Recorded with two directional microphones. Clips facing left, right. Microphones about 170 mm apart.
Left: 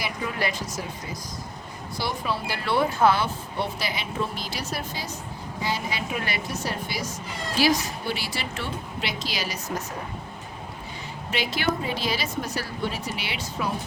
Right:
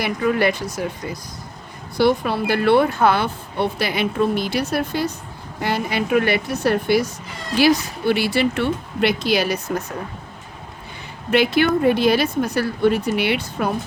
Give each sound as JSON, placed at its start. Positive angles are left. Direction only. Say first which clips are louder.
{"t": 0.0, "sound": "speech", "louder": "right 10 dB", "side_deg": -60}
{"t": 11.3, "sound": "speech", "louder": "right 10 dB", "side_deg": -60}